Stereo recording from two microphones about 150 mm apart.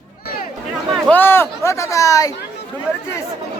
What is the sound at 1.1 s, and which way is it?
Speech, 15° left (ahead or behind).